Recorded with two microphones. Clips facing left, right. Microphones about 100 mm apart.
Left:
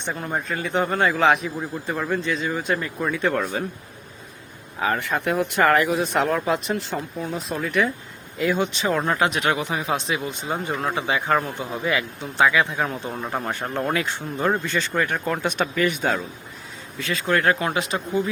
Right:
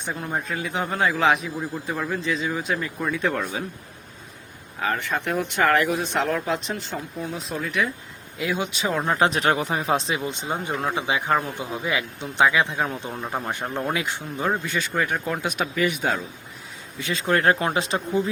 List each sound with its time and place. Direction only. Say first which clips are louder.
0.0 s a man's voice: left 1 dB; centre (ahead or behind)
4.8 s a man's voice: left 2 dB; 5° left (ahead or behind); by 9.1 s 10° right (ahead or behind)
9.1 s speech: right 1 dB; 35° right (ahead or behind)
13.2 s a man's voice: left 1 dB; centre (ahead or behind)
13.9 s speech: left 2 dB; 10° right (ahead or behind)
17.0 s speech: even; 25° right (ahead or behind)